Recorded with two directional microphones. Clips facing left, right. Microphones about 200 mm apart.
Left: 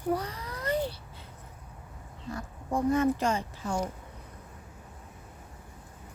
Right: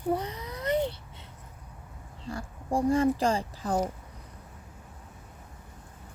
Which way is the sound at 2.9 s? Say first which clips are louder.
Right 1 dB; 30° right (ahead or behind).